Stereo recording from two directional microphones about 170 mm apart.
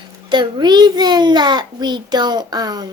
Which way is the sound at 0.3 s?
25° right (ahead or behind).